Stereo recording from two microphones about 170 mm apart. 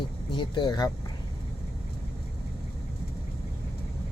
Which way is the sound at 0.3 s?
25° left (ahead or behind).